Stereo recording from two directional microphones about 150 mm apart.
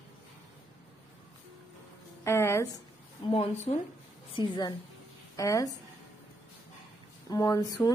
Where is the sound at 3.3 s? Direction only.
40° left (ahead or behind).